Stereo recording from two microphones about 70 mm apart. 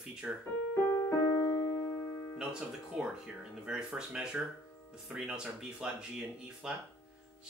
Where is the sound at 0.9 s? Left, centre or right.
Left.